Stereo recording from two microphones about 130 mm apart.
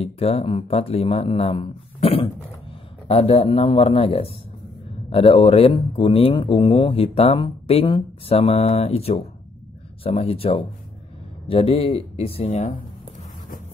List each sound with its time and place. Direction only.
0.0 s speech: 50° left (ahead or behind)